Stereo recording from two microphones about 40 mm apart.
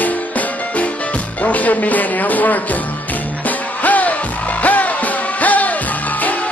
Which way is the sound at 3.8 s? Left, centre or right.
Left.